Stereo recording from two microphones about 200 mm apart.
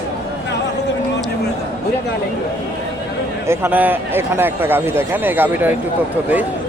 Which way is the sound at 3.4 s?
10° right (ahead or behind).